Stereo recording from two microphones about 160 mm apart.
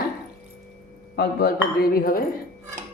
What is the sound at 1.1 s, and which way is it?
Speech, 80° left.